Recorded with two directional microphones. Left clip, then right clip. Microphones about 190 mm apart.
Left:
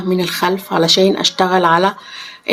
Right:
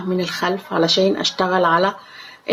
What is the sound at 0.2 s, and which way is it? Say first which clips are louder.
Speech: left 4 dB; 30° left (ahead or behind).